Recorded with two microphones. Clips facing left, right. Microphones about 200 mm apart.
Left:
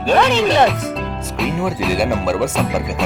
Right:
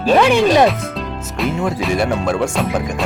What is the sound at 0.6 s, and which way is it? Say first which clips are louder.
Speech: right 1 dB; centre (ahead or behind).